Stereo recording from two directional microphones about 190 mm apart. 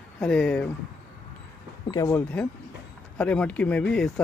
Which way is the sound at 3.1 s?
5° left (ahead or behind).